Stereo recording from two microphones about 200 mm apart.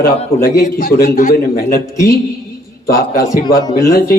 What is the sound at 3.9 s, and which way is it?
Speech, 45° left (ahead or behind).